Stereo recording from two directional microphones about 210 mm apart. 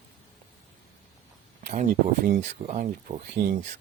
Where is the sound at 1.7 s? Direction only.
45° right (ahead or behind).